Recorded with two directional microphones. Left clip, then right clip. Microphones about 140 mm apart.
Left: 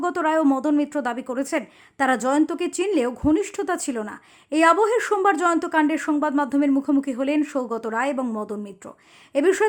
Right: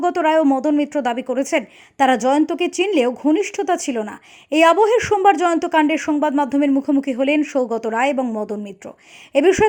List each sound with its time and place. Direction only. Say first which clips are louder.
0.0 s a woman's voice: right 5 dB; 15° right (ahead or behind)